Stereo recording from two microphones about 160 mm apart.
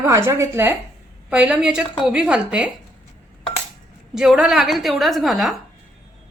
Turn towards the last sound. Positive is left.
turn(degrees=0)  # may be behind; listen again after turning